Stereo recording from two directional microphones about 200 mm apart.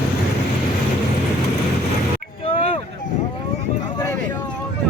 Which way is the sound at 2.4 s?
30° left (ahead or behind).